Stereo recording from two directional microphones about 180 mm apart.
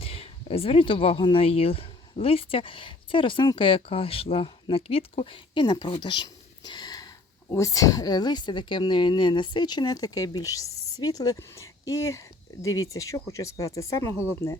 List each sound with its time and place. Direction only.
0.0 s a woman's voice: 35° left (ahead or behind); by 14.6 s 15° left (ahead or behind)